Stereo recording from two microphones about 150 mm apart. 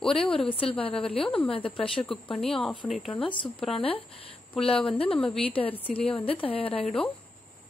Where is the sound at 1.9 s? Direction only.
5° left (ahead or behind).